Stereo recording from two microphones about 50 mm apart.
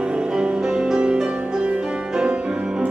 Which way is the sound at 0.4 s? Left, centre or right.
Centre.